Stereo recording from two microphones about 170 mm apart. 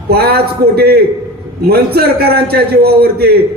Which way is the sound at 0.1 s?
65° right (ahead or behind).